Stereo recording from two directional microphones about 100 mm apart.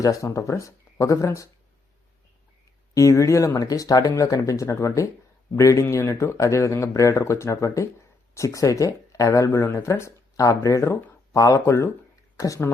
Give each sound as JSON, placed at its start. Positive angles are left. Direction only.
{"t": 0.0, "sound": "speech", "side_deg": 30}
{"t": 2.9, "sound": "speech", "side_deg": 30}
{"t": 9.5, "sound": "speech", "side_deg": 25}